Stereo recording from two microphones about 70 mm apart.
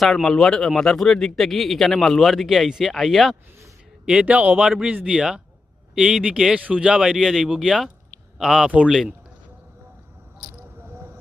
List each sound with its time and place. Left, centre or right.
0.0 s speech: centre
4.0 s speech: centre
10.8 s a sound: right